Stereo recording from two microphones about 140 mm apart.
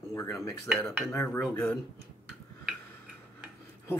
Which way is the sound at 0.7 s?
5° left (ahead or behind).